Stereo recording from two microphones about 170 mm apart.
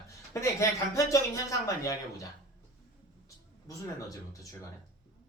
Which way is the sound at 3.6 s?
20° left (ahead or behind).